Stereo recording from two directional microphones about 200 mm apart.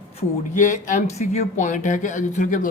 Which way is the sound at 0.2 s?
40° left (ahead or behind).